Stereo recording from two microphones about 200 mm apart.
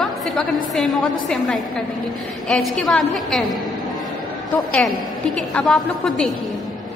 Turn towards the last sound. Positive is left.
turn(degrees=0)  # may be behind; listen again after turning